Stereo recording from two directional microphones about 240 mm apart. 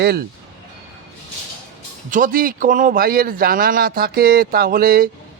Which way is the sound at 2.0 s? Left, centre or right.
Right.